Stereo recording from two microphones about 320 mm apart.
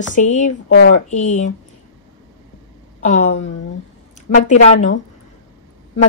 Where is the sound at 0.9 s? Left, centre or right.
Left.